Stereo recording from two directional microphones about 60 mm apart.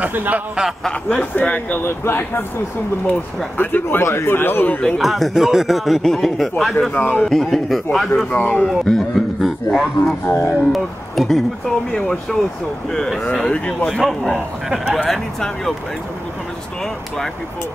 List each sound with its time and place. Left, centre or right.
0.1 s speech: right
0.8 s speech: centre
1.3 s speech: left
3.5 s speech: left
4.8 s speech: centre
6.9 s a man's voice: left
7.2 s speech: centre
8.3 s speech: left
8.6 s a man's voice: centre
10.2 s speech: left
10.7 s speech: centre
15.0 s speech: centre